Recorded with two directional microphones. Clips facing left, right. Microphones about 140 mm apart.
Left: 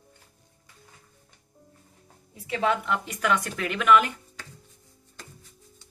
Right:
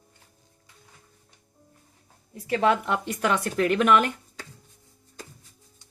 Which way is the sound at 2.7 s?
35° right (ahead or behind).